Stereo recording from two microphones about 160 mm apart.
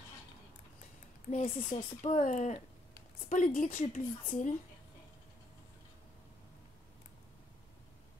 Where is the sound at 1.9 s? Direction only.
50° left (ahead or behind).